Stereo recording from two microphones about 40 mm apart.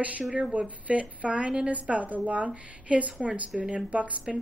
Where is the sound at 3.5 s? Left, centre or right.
Centre.